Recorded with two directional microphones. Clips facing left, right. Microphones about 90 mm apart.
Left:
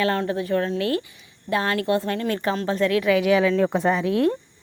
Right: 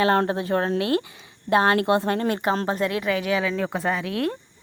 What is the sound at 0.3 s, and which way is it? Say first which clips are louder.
Speech: even; 30° right (ahead or behind).